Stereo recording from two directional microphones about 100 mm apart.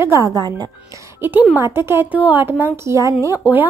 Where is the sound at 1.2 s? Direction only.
15° right (ahead or behind).